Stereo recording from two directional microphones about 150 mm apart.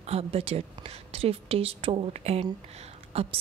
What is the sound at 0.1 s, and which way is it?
A woman's voice, 40° right (ahead or behind).